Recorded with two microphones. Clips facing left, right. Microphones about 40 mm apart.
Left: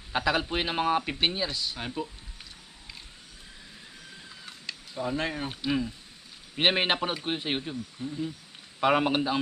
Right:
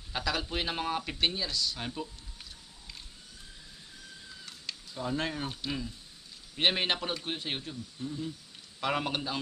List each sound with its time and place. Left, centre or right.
0.1 s a man's voice: left
4.6 s a sound: centre
5.7 s a man's voice: left